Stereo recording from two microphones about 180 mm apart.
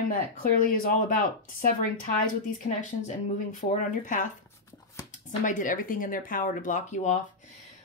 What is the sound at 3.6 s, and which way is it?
Speech, 45° left (ahead or behind).